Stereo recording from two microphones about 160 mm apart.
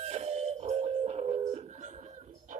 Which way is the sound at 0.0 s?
40° right (ahead or behind).